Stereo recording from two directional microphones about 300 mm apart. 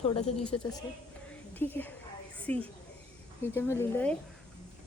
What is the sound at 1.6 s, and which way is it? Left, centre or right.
A woman's voice, centre.